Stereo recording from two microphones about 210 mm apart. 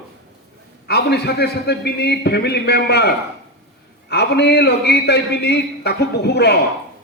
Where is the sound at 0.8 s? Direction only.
50° left (ahead or behind).